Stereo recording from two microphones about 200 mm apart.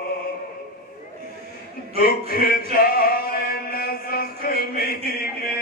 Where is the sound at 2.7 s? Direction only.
50° left (ahead or behind).